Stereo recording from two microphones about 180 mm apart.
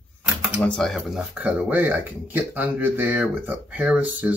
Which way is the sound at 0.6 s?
5° left (ahead or behind).